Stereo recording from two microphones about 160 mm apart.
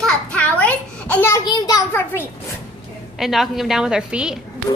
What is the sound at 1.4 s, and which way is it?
Speech, 25° left (ahead or behind).